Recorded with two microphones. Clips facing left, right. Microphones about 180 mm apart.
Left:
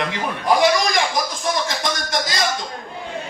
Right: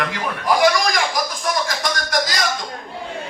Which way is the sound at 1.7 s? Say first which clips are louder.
Even; 25° left (ahead or behind).